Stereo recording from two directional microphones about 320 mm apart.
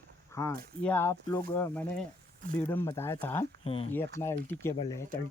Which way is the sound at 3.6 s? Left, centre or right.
Centre.